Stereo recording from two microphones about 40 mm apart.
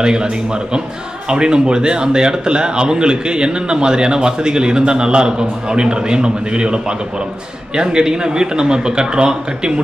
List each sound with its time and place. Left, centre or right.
0.0 s a man's voice: right
1.3 s a man's voice: right